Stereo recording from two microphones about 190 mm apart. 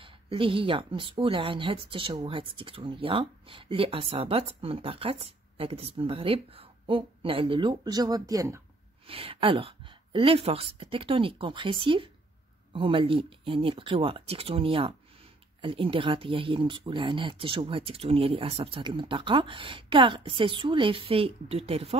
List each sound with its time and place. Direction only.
0.0 s speech: 25° right (ahead or behind)
9.0 s speech: 30° right (ahead or behind)